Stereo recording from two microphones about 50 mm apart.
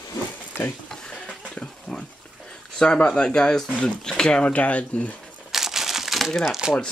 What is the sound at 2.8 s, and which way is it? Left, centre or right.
Speech, centre.